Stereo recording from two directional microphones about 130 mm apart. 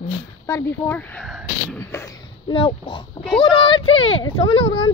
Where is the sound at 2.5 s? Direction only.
40° left (ahead or behind).